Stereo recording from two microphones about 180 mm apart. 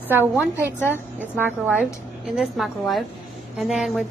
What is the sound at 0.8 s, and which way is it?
Speech, 10° left (ahead or behind).